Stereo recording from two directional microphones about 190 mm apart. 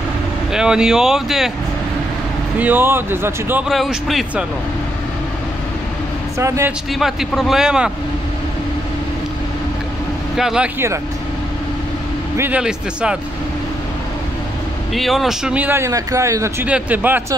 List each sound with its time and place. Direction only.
0.5 s speech: 5° right (ahead or behind)
2.6 s a man's voice: 10° right (ahead or behind)
6.3 s a man's voice: 15° right (ahead or behind)
6.9 s speech: centre (ahead or behind)
10.3 s speech: 5° right (ahead or behind)
12.4 s speech: 5° right (ahead or behind)
15.0 s a man's voice: centre (ahead or behind)